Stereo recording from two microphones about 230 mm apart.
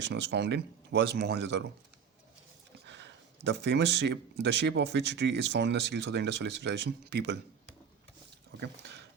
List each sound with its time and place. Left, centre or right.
0.1 s speech: right
2.8 s speech: right